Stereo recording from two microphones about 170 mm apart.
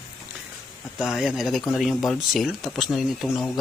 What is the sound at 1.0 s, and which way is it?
Speech, centre (ahead or behind).